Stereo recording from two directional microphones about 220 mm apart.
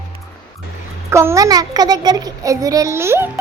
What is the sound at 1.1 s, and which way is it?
Speech, 15° right (ahead or behind).